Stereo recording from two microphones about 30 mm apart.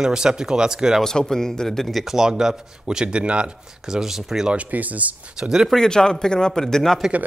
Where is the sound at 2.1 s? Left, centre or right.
Centre.